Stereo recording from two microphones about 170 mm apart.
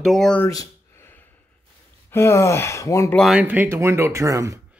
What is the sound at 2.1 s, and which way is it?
Speech, 15° left (ahead or behind).